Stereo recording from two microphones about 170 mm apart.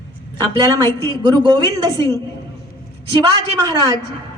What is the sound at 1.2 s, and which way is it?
Speech, 25° right (ahead or behind).